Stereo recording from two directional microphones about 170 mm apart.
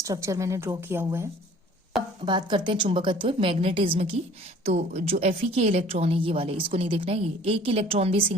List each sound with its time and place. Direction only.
0.0 s a woman's voice: 20° right (ahead or behind)
2.2 s a woman's voice: 25° right (ahead or behind)